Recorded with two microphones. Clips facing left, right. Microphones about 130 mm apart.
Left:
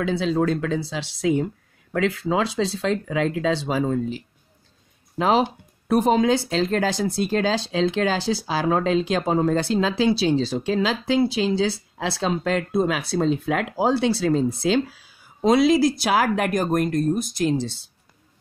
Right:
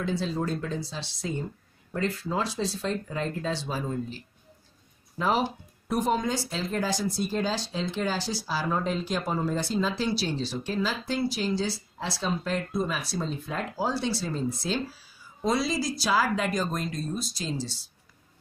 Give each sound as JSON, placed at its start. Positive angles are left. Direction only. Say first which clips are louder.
{"t": 0.0, "sound": "speech", "louder": "left 8 dB", "side_deg": 80}
{"t": 12.0, "sound": "speech", "louder": "left 7 dB", "side_deg": 90}
{"t": 14.6, "sound": "a woman's voice", "louder": "left 9 dB", "side_deg": 65}